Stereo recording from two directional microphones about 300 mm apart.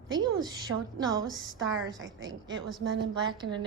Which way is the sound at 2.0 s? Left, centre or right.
Right.